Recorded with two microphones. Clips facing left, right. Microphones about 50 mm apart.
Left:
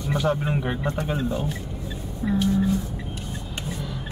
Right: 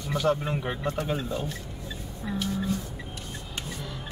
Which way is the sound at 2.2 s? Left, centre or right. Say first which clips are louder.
Left 7 dB; centre.